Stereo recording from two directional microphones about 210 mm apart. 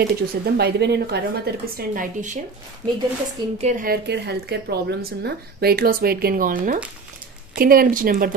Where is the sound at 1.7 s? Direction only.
40° right (ahead or behind).